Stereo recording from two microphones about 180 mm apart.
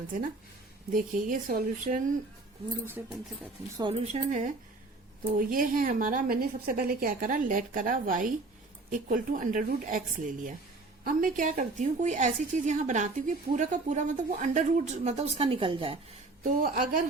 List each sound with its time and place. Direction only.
0.9 s a woman's voice: 50° right (ahead or behind)
3.0 s speech: 10° right (ahead or behind)
3.8 s a woman's voice: 30° right (ahead or behind)
16.4 s a woman's voice: 50° right (ahead or behind)